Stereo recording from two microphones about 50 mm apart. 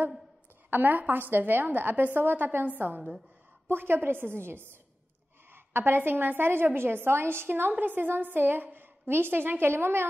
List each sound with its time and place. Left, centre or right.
0.7 s a woman's voice: right